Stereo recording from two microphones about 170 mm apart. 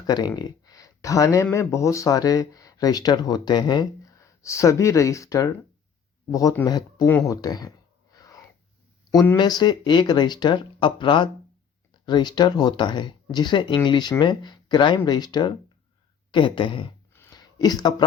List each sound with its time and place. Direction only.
0.0 s speech: 25° left (ahead or behind)
8.1 s wheeze: 20° left (ahead or behind)
9.4 s speech: 25° left (ahead or behind)
17.3 s a sound: 25° left (ahead or behind)